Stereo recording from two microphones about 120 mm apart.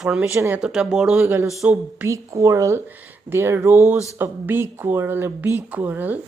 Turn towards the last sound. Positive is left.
turn(degrees=-15)  # may be behind; listen again after turning